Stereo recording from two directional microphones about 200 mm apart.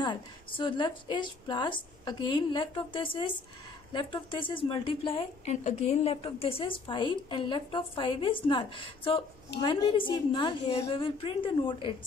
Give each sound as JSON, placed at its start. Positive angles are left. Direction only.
{"t": 0.0, "sound": "a woman's voice", "side_deg": 25}